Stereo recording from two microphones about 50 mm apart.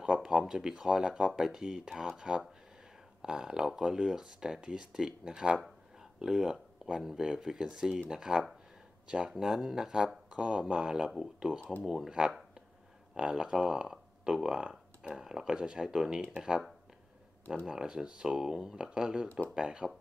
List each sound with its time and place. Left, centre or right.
0.0 s speech: centre
17.6 s speech: centre